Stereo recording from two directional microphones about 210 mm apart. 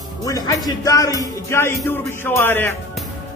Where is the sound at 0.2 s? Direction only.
15° left (ahead or behind).